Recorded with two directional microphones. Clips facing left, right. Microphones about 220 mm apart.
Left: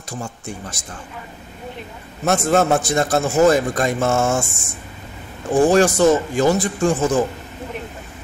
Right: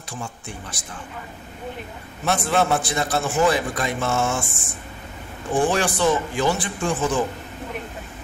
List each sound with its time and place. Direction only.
0.1 s a man's voice: 45° left (ahead or behind)
2.2 s a man's voice: 45° left (ahead or behind)